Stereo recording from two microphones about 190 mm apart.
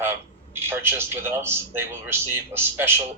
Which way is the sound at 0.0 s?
10° right (ahead or behind).